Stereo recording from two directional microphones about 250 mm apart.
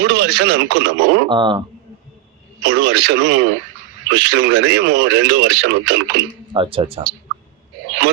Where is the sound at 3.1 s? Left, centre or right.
Right.